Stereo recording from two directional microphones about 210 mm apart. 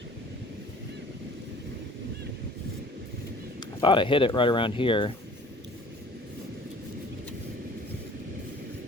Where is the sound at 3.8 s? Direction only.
25° left (ahead or behind).